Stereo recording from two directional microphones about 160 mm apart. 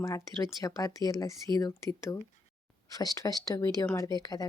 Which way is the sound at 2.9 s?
25° left (ahead or behind).